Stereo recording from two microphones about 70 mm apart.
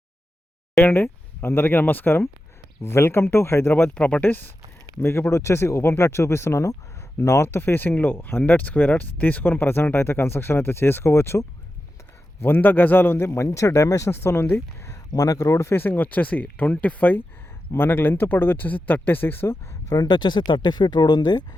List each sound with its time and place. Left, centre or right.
0.9 s speech: left
3.9 s speech: centre
5.3 s speech: left
14.1 s speech: left
15.1 s speech: left
15.7 s speech: left
19.9 s speech: left